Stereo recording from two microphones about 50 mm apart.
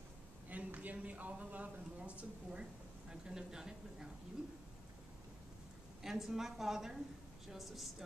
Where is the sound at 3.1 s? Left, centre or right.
Centre.